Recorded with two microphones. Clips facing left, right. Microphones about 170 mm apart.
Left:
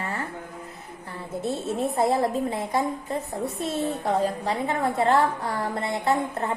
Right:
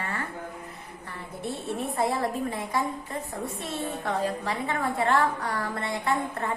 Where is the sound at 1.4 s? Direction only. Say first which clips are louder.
Left 4 dB; 25° left (ahead or behind).